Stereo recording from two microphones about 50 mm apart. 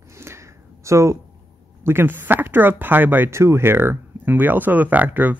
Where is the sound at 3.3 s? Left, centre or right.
Right.